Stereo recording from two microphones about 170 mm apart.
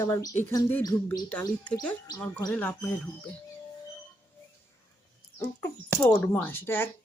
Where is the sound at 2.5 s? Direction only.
10° left (ahead or behind).